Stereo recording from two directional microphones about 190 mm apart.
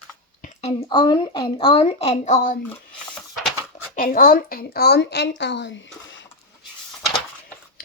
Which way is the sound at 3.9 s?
50° left (ahead or behind).